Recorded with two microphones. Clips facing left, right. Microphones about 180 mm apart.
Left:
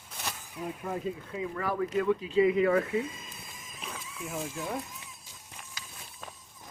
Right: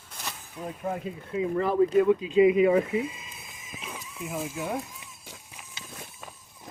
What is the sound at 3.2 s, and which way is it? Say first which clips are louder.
Horse: even; centre (ahead or behind).